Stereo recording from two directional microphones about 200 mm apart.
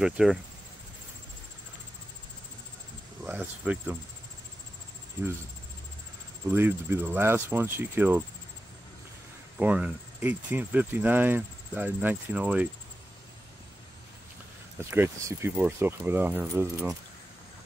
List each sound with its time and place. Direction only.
0.0 s cricket: centre (ahead or behind)
3.3 s speech: 5° right (ahead or behind)
6.5 s speech: 10° right (ahead or behind)
9.6 s speech: 5° right (ahead or behind)
14.8 s speech: 15° right (ahead or behind)